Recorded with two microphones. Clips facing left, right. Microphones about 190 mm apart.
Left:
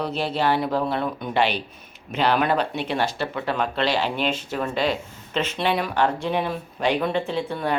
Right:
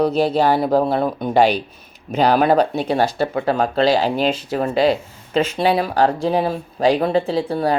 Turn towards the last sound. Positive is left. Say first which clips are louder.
# right 6 dB
turn(degrees=-35)  # may be behind; listen again after turning